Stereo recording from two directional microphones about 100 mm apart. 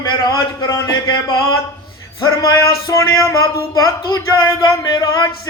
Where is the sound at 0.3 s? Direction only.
35° left (ahead or behind).